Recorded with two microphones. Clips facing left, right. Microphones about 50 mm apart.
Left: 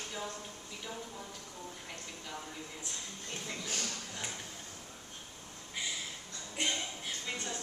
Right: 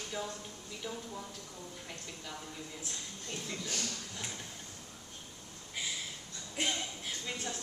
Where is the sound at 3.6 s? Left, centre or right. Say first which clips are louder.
Left 1 dB; left.